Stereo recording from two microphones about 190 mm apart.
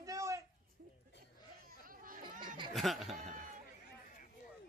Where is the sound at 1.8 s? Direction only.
45° right (ahead or behind).